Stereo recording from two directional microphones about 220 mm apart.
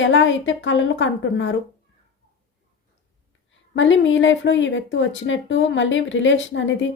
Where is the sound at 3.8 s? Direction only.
60° left (ahead or behind).